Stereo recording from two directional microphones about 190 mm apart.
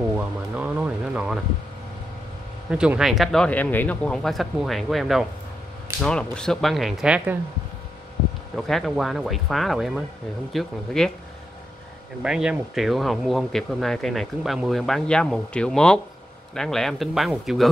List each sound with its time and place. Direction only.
0.6 s a sound: 5° right (ahead or behind)
2.7 s speech: 5° right (ahead or behind)
8.5 s speech: centre (ahead or behind)
12.2 s speech: 5° right (ahead or behind)